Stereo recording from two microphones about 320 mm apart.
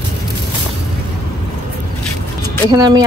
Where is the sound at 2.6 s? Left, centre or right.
Centre.